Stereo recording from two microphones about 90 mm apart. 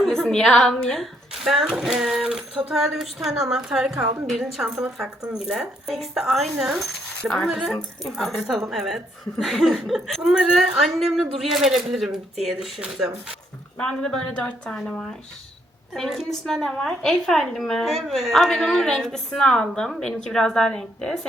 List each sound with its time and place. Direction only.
0.0 s a woman's voice: 5° left (ahead or behind)
1.5 s a woman's voice: 5° right (ahead or behind)
3.9 s a woman's voice: 30° right (ahead or behind)
4.3 s a woman's voice: centre (ahead or behind)
13.7 s a woman's voice: 5° left (ahead or behind)